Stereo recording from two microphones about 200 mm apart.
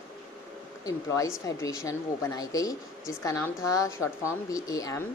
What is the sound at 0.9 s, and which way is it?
A woman's voice, 15° left (ahead or behind).